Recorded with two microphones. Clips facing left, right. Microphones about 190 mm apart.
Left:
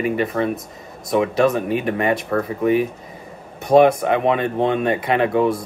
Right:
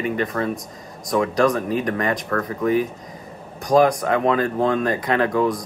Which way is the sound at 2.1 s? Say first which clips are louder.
Left 3 dB; 25° left (ahead or behind).